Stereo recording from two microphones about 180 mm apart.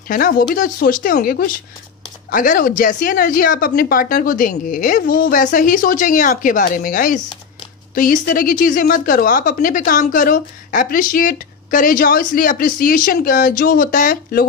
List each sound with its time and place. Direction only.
0.1 s a woman's voice: 55° left (ahead or behind)